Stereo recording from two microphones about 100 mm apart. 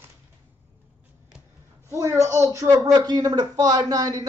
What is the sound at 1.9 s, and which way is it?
Speech, 30° right (ahead or behind).